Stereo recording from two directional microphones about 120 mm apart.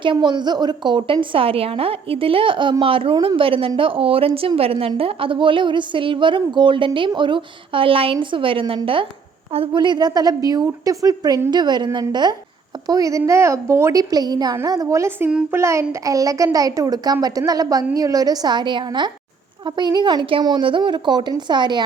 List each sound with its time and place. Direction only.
0.0 s a woman's voice: 40° right (ahead or behind); by 14.0 s 25° right (ahead or behind)
14.0 s a woman's voice: 35° right (ahead or behind)